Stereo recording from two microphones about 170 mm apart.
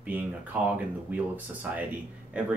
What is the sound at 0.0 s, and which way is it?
Speech, 10° right (ahead or behind).